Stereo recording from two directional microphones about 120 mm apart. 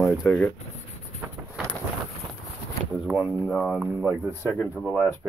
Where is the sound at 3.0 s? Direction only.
10° right (ahead or behind).